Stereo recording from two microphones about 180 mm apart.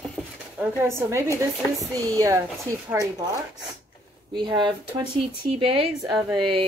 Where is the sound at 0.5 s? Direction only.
10° right (ahead or behind).